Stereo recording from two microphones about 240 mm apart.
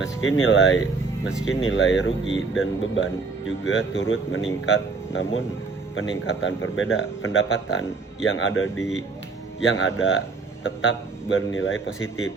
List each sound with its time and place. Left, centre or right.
0.0 s speech: left